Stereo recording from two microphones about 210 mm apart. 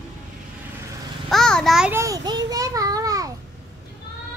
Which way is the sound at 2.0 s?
20° right (ahead or behind).